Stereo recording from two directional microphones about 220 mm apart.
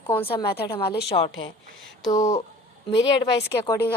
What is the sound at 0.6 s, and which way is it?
Speech, 20° left (ahead or behind).